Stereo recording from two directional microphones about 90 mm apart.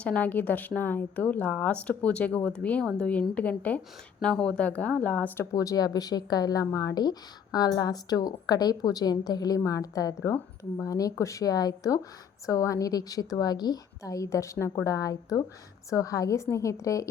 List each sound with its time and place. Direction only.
0.0 s a woman's voice: 15° left (ahead or behind)
5.5 s a woman's voice: 45° left (ahead or behind)